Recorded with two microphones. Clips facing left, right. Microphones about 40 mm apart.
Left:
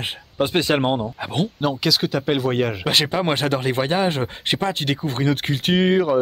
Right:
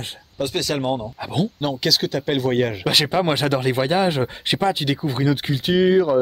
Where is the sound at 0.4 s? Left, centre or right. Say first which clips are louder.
Left 4 dB; left.